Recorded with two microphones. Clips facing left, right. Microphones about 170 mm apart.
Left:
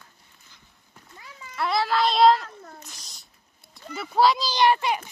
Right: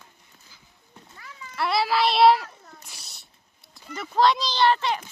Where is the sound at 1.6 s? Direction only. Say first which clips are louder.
Even; 5° right (ahead or behind).